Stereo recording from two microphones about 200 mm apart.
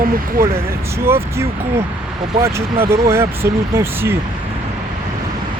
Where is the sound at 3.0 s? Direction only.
10° right (ahead or behind).